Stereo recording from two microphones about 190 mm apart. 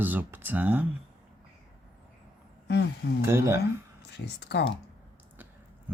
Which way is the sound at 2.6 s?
65° left (ahead or behind).